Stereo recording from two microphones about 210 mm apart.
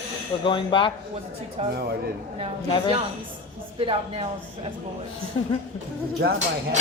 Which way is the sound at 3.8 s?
25° right (ahead or behind).